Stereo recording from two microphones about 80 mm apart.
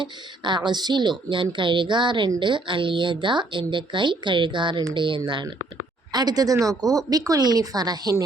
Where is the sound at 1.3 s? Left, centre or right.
Right.